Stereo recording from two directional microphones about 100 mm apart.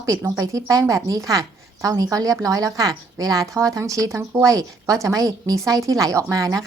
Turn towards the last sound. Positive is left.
turn(degrees=-35)  # may be behind; listen again after turning